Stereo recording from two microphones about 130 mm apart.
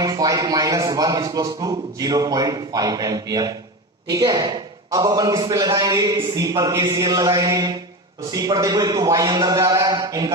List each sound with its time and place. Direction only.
0.0 s a man's voice: 30° right (ahead or behind)